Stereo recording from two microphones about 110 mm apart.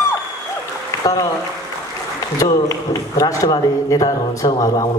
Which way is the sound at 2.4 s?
30° left (ahead or behind).